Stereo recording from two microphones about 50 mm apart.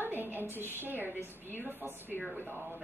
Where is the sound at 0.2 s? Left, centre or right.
Right.